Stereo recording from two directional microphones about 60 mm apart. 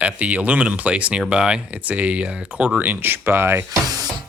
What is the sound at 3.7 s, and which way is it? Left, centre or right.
Speech, right.